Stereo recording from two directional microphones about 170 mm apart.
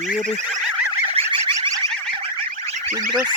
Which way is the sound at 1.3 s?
30° right (ahead or behind).